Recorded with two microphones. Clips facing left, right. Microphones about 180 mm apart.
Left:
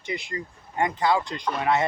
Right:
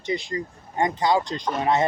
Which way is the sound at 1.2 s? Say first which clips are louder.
Right 2 dB; 40° right (ahead or behind).